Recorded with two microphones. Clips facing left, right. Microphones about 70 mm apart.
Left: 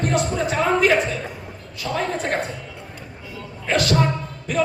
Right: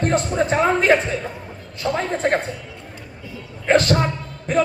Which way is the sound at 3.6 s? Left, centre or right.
Right.